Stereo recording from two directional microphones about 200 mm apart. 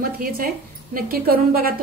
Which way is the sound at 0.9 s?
45° right (ahead or behind).